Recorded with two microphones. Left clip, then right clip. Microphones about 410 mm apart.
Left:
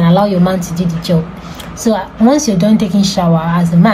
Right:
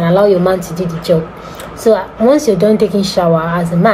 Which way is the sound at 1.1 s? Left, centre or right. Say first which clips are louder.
Right 5 dB; right.